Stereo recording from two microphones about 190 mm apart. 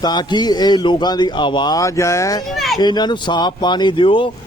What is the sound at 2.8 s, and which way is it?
A man's voice, 20° left (ahead or behind).